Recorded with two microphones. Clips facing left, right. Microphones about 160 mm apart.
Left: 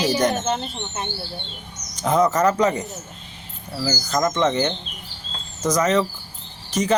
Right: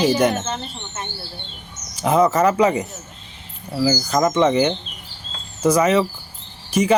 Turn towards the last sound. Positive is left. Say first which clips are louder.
# right 4 dB
turn(degrees=-10)  # may be behind; listen again after turning